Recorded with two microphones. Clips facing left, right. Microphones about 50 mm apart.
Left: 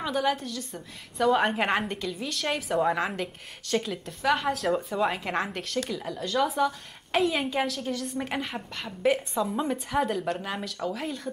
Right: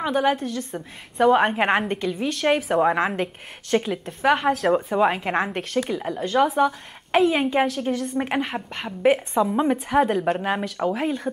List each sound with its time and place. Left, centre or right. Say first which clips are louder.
0.0 s a woman's voice: right 6 dB; right